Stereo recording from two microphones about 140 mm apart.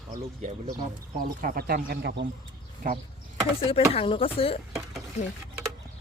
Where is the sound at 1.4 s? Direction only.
90° right.